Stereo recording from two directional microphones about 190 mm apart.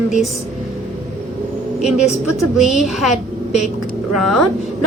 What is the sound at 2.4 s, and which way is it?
A woman's voice, centre (ahead or behind).